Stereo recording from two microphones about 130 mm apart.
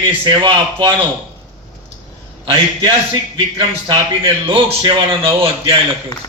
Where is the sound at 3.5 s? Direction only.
40° right (ahead or behind).